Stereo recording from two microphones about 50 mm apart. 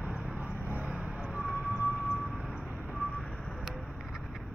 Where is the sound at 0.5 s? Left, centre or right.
Left.